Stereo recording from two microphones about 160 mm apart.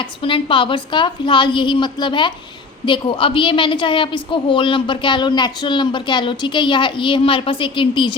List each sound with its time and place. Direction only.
0.0 s a woman's voice: 35° left (ahead or behind)